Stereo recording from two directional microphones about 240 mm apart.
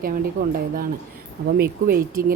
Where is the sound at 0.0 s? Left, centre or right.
Right.